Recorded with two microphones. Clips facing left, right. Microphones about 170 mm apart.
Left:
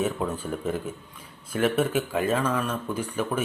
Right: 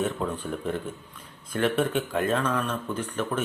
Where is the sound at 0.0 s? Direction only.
5° left (ahead or behind).